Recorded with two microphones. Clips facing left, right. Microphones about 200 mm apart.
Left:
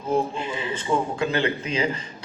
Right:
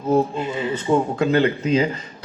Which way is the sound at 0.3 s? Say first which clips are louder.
Right 5 dB; 40° right (ahead or behind).